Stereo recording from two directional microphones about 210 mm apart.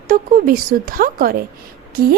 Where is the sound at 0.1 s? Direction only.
40° right (ahead or behind).